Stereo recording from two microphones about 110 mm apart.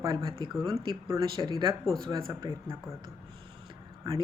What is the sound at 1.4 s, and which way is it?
Speech, 35° right (ahead or behind).